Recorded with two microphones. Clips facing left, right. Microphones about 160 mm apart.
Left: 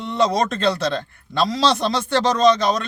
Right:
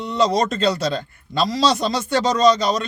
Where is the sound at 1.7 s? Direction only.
60° left (ahead or behind).